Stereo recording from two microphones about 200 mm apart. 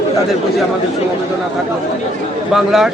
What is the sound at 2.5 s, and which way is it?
Speech, centre (ahead or behind).